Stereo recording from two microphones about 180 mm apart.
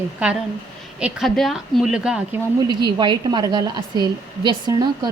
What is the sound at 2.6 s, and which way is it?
Speech, 25° right (ahead or behind).